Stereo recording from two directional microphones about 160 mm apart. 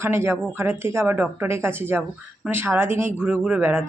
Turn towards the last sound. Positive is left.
turn(degrees=-10)  # may be behind; listen again after turning